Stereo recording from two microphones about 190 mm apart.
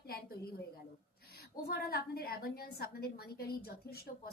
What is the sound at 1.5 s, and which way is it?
A woman's voice, 55° left (ahead or behind).